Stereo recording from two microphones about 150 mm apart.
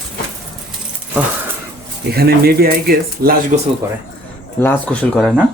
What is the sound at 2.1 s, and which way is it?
Speech, 90° right.